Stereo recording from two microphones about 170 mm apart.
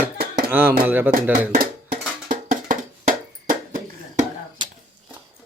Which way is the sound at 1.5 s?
60° right (ahead or behind).